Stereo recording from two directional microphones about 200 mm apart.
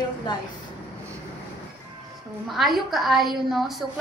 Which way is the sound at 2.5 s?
Centre (ahead or behind).